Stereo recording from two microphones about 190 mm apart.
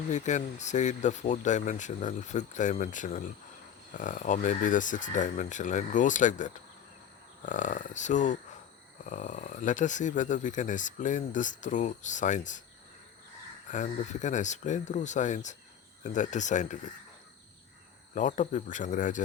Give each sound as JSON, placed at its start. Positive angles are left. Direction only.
{"t": 0.1, "sound": "speech", "side_deg": 40}
{"t": 13.7, "sound": "speech", "side_deg": 40}
{"t": 18.1, "sound": "speech", "side_deg": 40}